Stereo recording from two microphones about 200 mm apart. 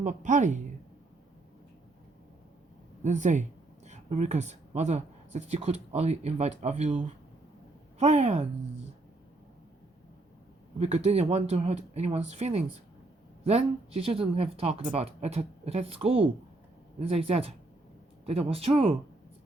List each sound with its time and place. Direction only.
0.0 s speech: 40° right (ahead or behind)
3.0 s speech: 35° right (ahead or behind)
10.8 s speech: 35° right (ahead or behind)